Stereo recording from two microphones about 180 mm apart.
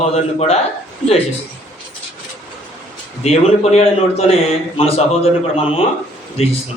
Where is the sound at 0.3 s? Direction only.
35° left (ahead or behind).